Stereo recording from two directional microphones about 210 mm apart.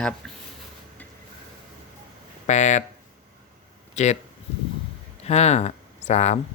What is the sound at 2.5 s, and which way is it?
Speech, 35° left (ahead or behind).